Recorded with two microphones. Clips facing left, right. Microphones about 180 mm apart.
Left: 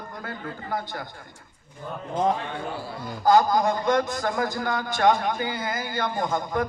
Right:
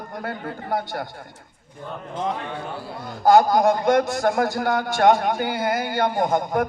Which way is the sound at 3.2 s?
60° right (ahead or behind).